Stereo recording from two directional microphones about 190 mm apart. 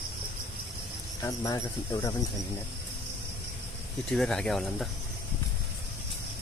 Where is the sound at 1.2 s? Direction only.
20° left (ahead or behind).